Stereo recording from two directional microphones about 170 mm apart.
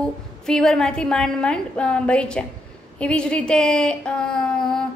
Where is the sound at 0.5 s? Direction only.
5° left (ahead or behind).